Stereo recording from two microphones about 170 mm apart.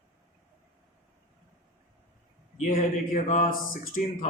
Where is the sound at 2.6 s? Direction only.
50° left (ahead or behind).